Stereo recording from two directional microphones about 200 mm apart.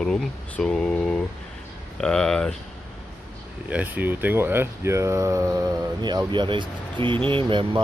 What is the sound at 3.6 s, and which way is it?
Speech, 5° right (ahead or behind).